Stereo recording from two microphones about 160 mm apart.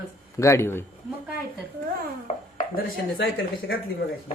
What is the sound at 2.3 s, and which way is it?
Speech, 45° left (ahead or behind).